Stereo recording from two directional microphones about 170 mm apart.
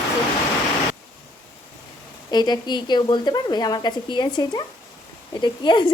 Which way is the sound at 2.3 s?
25° left (ahead or behind).